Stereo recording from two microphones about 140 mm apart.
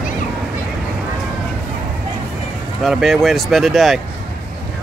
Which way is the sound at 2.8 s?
Centre (ahead or behind).